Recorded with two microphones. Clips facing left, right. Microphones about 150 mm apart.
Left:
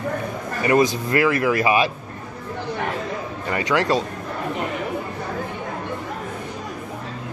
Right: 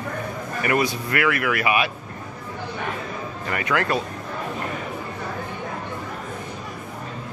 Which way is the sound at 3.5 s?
25° left (ahead or behind).